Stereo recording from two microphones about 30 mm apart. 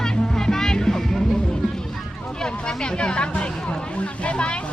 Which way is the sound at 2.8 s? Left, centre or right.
Left.